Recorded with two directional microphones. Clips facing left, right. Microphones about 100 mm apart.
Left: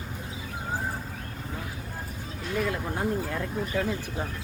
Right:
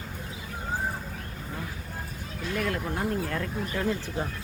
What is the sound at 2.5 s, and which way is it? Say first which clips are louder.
Speech: left 1 dB; 15° left (ahead or behind).